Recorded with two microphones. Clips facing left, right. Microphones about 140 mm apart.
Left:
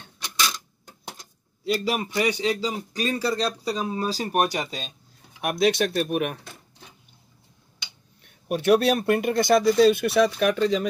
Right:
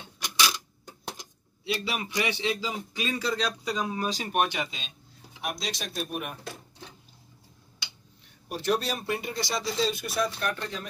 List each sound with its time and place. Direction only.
0.2 s a sound: 5° right (ahead or behind)
1.6 s a man's voice: 45° left (ahead or behind)
5.4 s speech: 60° left (ahead or behind)
8.5 s speech: 60° left (ahead or behind); by 10.9 s 90° left